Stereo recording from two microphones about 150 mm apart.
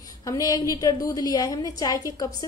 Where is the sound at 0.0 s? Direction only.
25° left (ahead or behind).